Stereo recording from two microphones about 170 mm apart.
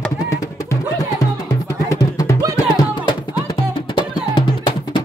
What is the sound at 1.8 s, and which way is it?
Music, 20° left (ahead or behind).